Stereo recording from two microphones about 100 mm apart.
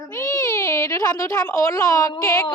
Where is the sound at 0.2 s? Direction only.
30° left (ahead or behind).